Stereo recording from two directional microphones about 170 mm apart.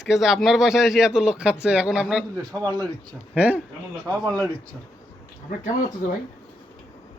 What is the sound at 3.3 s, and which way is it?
Speech, 10° right (ahead or behind).